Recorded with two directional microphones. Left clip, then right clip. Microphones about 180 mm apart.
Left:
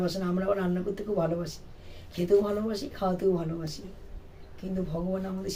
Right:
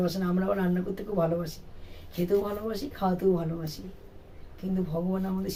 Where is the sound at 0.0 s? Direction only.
10° left (ahead or behind).